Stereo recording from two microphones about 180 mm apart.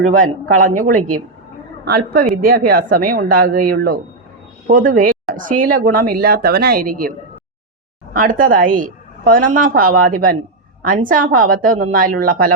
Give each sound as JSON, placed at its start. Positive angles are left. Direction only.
{"t": 0.0, "sound": "speech", "side_deg": -50}
{"t": 1.8, "sound": "a woman's voice", "side_deg": -60}
{"t": 8.1, "sound": "speech", "side_deg": -50}